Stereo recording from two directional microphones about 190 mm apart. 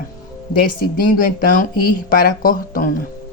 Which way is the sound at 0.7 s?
50° left (ahead or behind).